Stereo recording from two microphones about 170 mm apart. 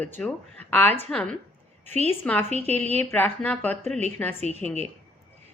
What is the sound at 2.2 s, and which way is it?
Speech, 10° left (ahead or behind).